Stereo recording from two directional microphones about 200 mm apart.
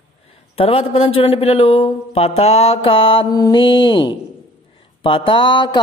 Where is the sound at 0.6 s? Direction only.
30° left (ahead or behind).